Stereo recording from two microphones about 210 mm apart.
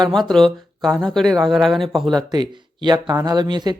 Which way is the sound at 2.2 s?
20° right (ahead or behind).